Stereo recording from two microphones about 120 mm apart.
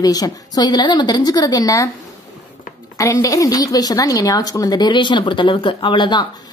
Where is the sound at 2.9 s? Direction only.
25° left (ahead or behind).